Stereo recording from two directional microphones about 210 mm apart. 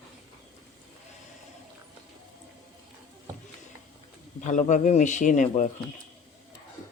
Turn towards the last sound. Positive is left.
turn(degrees=35)  # may be behind; listen again after turning